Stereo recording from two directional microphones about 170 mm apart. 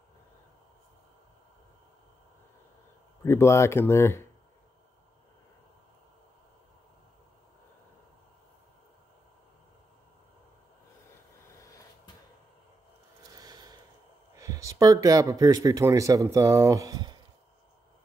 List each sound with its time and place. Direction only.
3.3 s speech: 15° left (ahead or behind)
13.3 s a sound: 25° right (ahead or behind)
14.3 s speech: 20° right (ahead or behind)